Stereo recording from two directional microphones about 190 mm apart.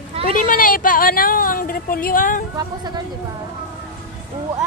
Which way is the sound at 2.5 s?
20° right (ahead or behind).